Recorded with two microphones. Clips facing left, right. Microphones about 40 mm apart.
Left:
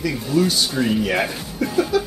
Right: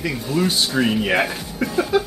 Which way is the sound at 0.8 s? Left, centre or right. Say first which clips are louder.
Right 2 dB; right.